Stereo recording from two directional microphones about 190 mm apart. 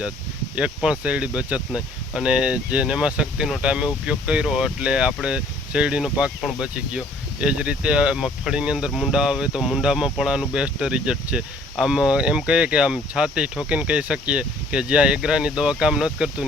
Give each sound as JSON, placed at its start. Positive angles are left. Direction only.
{"t": 0.5, "sound": "speech", "side_deg": -5}